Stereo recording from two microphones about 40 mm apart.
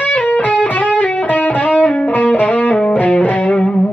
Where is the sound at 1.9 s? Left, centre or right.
Left.